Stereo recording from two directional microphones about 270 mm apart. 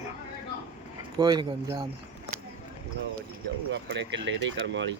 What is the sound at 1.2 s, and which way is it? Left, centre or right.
Speech, centre.